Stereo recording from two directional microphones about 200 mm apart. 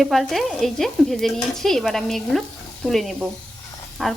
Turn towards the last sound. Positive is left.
turn(degrees=0)  # may be behind; listen again after turning